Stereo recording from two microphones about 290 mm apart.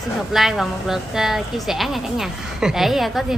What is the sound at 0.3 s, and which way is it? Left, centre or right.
A woman's voice, centre.